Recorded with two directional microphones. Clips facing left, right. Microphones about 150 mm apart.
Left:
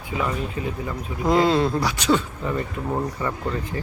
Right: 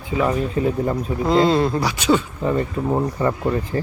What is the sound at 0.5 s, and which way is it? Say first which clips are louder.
Speech: right 8 dB; 40° right (ahead or behind).